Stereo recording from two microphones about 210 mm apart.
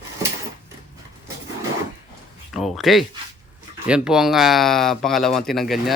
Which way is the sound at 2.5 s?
Centre (ahead or behind).